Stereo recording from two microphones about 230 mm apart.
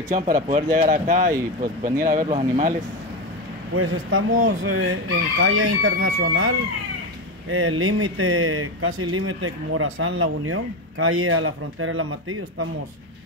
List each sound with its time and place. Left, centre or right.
0.1 s speech: right
3.7 s speech: right